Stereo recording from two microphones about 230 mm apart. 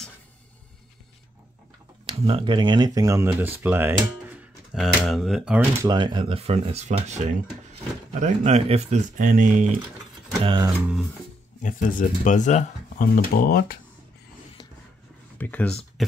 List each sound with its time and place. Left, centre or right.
2.0 s speech: right; by 5.9 s centre
5.9 s speech: centre
10.4 s speech: right
11.6 s speech: left
15.3 s speech: centre